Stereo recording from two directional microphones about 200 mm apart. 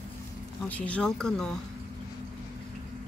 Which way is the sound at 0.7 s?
5° left (ahead or behind).